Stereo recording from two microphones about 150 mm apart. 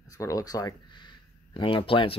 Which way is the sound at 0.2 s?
20° left (ahead or behind).